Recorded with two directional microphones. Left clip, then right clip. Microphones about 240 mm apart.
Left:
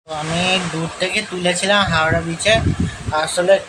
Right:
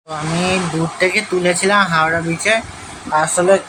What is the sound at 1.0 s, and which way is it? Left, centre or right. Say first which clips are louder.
Speech: right 4 dB; centre.